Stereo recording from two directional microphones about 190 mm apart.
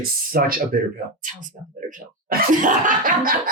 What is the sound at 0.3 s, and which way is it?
Speech, 50° right (ahead or behind).